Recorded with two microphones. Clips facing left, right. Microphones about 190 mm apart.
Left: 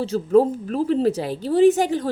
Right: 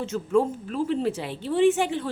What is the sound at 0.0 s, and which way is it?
A woman's voice, 35° left (ahead or behind).